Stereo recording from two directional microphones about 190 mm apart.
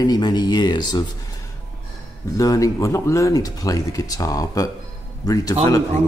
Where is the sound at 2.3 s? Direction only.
15° left (ahead or behind).